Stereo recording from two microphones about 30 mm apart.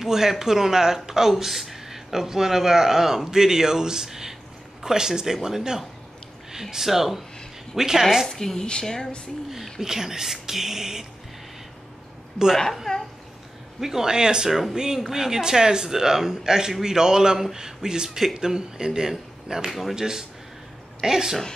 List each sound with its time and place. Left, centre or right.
0.0 s a man's voice: centre
8.3 s speech: centre
9.8 s speech: centre
12.9 s speech: centre
13.7 s speech: centre
14.1 s a man's voice: right
19.7 s speech: centre
20.0 s a man's voice: centre